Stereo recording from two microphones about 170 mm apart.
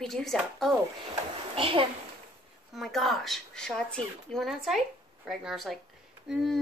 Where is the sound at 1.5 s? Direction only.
30° right (ahead or behind).